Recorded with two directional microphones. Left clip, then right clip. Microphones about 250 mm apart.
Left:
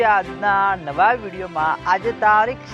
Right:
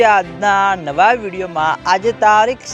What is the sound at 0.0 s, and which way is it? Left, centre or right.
Speech, right.